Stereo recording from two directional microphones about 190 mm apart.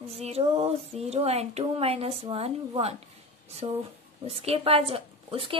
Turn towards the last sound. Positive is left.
turn(degrees=-30)  # may be behind; listen again after turning